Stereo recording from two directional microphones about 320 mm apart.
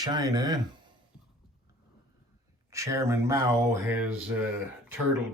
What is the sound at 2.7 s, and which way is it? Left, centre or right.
Speech, centre.